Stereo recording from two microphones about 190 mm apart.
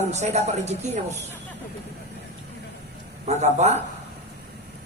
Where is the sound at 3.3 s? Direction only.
35° right (ahead or behind).